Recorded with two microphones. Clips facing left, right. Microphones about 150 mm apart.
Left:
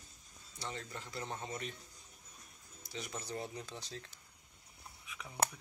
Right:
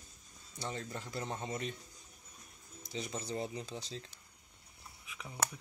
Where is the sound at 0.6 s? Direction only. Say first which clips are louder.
Right 3 dB; 30° right (ahead or behind).